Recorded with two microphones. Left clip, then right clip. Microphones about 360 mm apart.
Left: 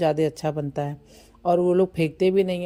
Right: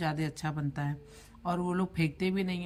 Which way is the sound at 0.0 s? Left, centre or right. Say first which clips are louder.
Left 13 dB; centre.